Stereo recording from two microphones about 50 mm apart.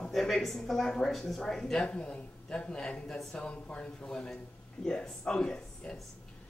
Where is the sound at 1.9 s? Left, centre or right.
Left.